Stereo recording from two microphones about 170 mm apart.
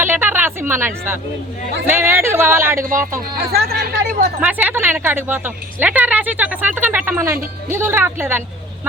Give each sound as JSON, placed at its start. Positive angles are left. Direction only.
{"t": 0.0, "sound": "a woman's voice", "side_deg": -10}
{"t": 3.3, "sound": "speech", "side_deg": -65}
{"t": 4.4, "sound": "speech", "side_deg": -10}